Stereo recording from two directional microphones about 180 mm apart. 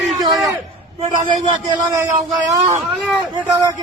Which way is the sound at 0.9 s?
30° right (ahead or behind).